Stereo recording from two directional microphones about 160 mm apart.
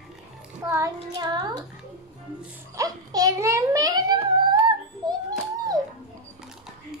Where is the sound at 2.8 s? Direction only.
20° right (ahead or behind).